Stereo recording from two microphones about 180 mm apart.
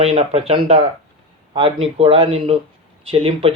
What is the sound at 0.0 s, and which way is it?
Speech, 35° right (ahead or behind).